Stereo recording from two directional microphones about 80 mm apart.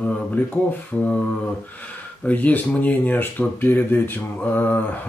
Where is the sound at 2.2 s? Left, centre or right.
Left.